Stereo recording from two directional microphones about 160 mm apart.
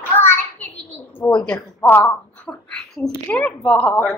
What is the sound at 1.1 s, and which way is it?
Speech, 10° left (ahead or behind).